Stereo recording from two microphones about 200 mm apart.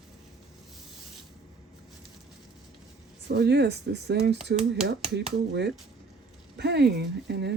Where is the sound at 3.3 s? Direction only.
55° right (ahead or behind).